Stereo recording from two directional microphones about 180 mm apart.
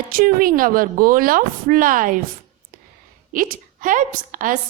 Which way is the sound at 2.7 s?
50° right (ahead or behind).